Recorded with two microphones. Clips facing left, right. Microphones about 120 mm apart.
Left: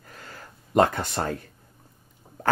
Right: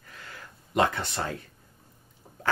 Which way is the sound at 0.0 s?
40° left (ahead or behind).